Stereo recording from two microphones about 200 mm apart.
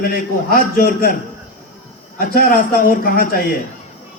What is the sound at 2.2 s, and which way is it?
A man's voice, 45° left (ahead or behind).